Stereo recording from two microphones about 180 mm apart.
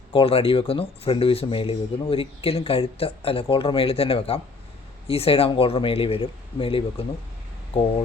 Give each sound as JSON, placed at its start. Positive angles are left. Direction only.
{"t": 0.1, "sound": "speech", "side_deg": 30}